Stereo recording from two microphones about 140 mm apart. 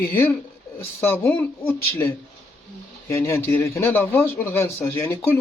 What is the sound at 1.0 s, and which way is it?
Speech, 15° left (ahead or behind).